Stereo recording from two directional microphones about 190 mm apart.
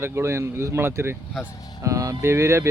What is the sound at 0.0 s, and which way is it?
Speech, 15° right (ahead or behind).